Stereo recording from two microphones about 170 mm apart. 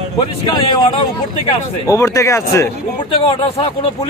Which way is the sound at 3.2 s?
30° left (ahead or behind).